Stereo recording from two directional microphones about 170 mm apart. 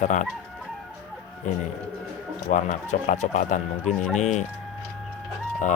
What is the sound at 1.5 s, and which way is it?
Speech, 45° left (ahead or behind).